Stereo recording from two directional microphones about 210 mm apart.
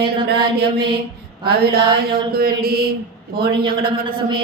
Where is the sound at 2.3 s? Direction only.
45° right (ahead or behind).